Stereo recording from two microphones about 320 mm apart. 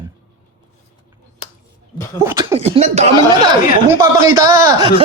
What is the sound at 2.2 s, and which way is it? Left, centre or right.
Speech, centre.